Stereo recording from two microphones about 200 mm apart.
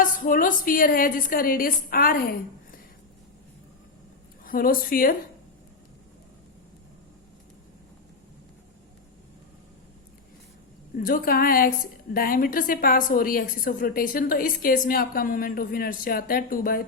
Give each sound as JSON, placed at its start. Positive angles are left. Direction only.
{"t": 0.0, "sound": "a woman's voice", "side_deg": 45}
{"t": 4.4, "sound": "a woman's voice", "side_deg": 45}
{"t": 10.9, "sound": "a woman's voice", "side_deg": 45}